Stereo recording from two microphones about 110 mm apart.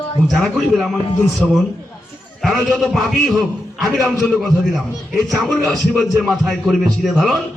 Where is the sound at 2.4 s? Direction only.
Centre (ahead or behind).